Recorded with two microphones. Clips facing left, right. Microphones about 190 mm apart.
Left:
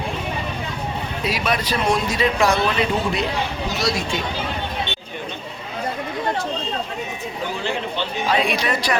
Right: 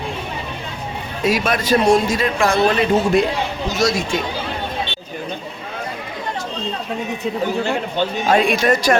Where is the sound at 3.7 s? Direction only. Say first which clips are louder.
Right 6 dB; 45° right (ahead or behind).